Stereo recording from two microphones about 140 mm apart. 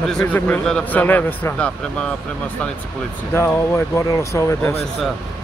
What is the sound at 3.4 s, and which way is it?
Speech, 20° left (ahead or behind).